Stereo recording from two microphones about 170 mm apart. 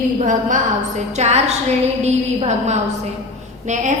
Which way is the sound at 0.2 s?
50° right (ahead or behind).